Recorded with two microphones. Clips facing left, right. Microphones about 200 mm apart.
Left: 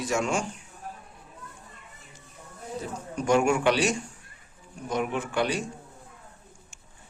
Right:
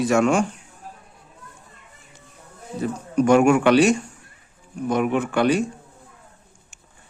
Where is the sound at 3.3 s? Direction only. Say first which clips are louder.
Right 6 dB; 65° right (ahead or behind).